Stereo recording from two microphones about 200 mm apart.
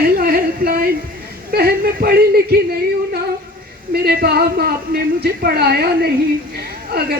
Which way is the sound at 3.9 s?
50° right (ahead or behind).